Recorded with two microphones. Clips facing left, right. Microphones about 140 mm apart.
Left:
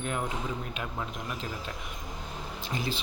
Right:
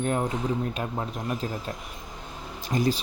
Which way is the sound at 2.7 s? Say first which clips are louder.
Right 9 dB; 40° right (ahead or behind).